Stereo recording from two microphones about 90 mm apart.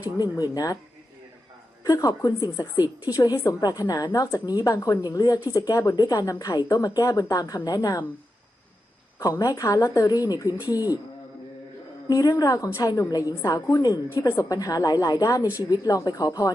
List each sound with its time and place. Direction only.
0.2 s a woman's voice: 45° left (ahead or behind)
1.8 s a woman's voice: 40° left (ahead or behind)
9.1 s a woman's voice: 40° left (ahead or behind)
12.0 s a woman's voice: 45° left (ahead or behind)